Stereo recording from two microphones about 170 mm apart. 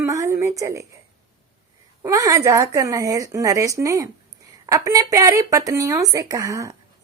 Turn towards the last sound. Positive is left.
turn(degrees=-20)  # may be behind; listen again after turning